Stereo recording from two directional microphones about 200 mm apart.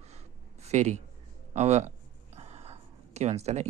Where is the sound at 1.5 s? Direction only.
35° right (ahead or behind).